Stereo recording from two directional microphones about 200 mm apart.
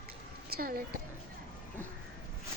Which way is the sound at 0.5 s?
50° right (ahead or behind).